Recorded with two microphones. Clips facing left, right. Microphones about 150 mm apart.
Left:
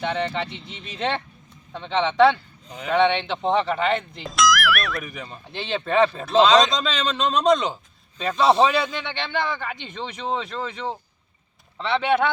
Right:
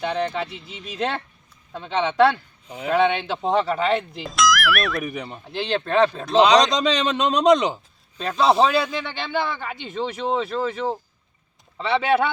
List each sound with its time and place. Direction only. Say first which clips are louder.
0.0 s speech: right 1 dB; centre (ahead or behind)
5.0 s a man's voice: right 6 dB; 20° right (ahead or behind)
5.5 s speech: right 2 dB; centre (ahead or behind)
6.7 s a man's voice: right 4 dB; 20° right (ahead or behind)
8.2 s speech: even; 5° right (ahead or behind)